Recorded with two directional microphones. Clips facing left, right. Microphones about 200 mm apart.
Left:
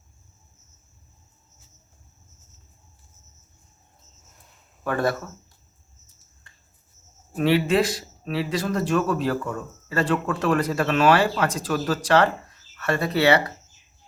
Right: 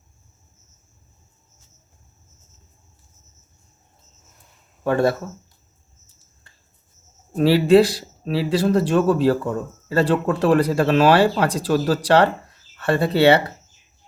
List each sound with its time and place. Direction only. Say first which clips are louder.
4.8 s speech: right 5 dB; 25° right (ahead or behind)
7.3 s a man's voice: right 6 dB; 35° right (ahead or behind)